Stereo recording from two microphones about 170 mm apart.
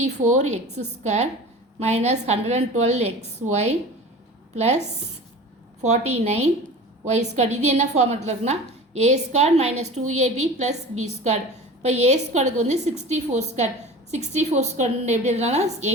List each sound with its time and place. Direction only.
0.0 s a woman's voice: 45° right (ahead or behind)
5.8 s a woman's voice: 40° right (ahead or behind)